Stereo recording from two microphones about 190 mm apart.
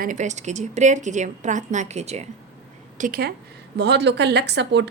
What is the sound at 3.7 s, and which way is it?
Speech, 65° right (ahead or behind).